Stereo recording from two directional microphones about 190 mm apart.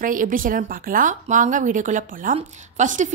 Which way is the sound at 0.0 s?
45° right (ahead or behind).